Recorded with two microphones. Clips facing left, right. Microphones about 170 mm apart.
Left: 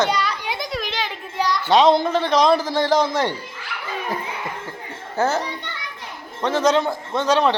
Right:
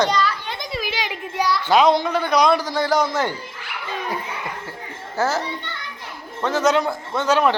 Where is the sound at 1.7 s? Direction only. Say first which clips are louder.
Left 2 dB; 25° left (ahead or behind).